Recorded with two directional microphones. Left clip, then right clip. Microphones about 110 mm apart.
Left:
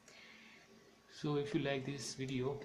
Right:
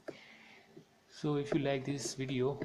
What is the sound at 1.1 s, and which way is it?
Speech, 25° right (ahead or behind).